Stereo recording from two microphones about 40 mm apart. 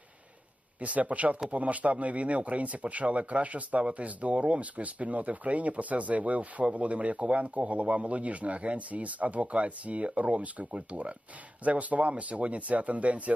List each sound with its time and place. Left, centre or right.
0.8 s speech: right